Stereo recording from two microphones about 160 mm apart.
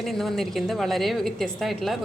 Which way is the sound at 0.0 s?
Centre (ahead or behind).